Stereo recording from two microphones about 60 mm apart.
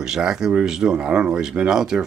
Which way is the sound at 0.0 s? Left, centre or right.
Centre.